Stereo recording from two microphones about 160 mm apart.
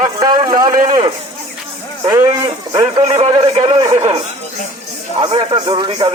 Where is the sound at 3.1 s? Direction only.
40° right (ahead or behind).